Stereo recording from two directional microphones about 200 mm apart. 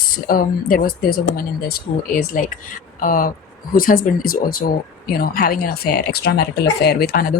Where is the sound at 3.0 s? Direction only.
45° left (ahead or behind).